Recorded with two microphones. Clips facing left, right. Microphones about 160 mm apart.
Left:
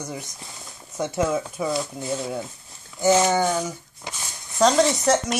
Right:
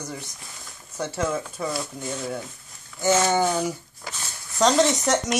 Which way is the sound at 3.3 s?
5° right (ahead or behind).